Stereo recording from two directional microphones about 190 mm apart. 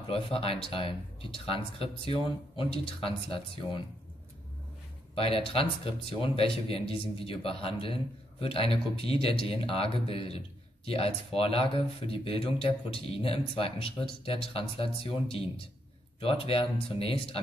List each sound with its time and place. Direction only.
0.1 s speech: 30° left (ahead or behind)
5.1 s speech: 30° left (ahead or behind)